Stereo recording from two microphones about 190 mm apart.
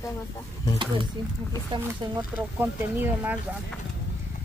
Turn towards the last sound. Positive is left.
turn(degrees=-10)  # may be behind; listen again after turning